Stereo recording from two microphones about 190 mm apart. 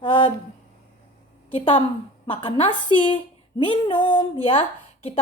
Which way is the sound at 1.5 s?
30° left (ahead or behind).